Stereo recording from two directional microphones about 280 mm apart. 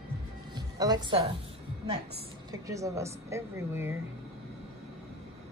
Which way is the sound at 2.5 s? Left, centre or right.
Centre.